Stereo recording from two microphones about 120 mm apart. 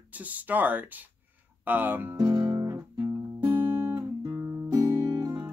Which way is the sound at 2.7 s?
20° right (ahead or behind).